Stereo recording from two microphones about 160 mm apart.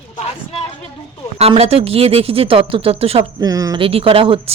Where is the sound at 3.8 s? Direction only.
35° right (ahead or behind).